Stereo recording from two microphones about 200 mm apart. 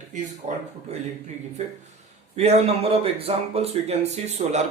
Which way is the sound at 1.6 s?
35° right (ahead or behind).